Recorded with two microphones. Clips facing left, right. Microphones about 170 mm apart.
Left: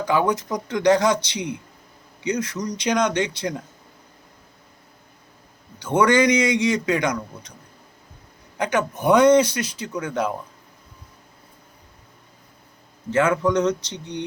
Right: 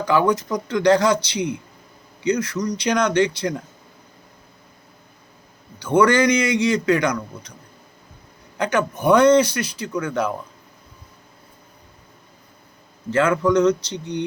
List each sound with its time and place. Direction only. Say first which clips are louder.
0.0 s a man's voice: right 2 dB; 20° left (ahead or behind)
5.8 s a man's voice: right 1 dB; 20° left (ahead or behind)
8.5 s a man's voice: right 2 dB; 15° left (ahead or behind)
13.1 s a man's voice: right 1 dB; 20° left (ahead or behind)